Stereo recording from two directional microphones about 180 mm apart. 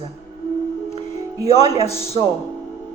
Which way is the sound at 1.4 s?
35° left (ahead or behind).